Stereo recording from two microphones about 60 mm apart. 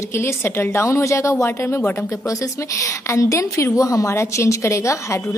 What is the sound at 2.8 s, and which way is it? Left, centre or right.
A woman's voice, left.